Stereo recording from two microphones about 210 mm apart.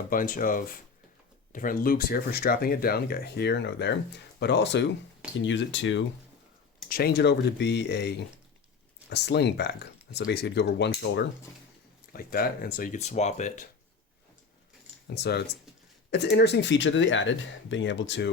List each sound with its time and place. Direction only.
0.1 s speech: 40° left (ahead or behind); by 6.1 s 60° left (ahead or behind)
6.8 s speech: 45° left (ahead or behind)
15.1 s speech: 50° left (ahead or behind)